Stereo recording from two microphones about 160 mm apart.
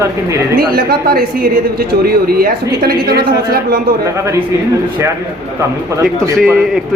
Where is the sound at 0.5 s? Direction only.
75° right (ahead or behind).